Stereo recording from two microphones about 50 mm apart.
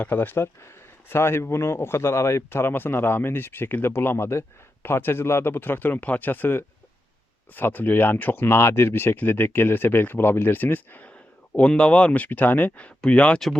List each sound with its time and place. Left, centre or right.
0.0 s speech: left
1.1 s speech: left
2.5 s speech: left
4.3 s speech: left
11.5 s speech: left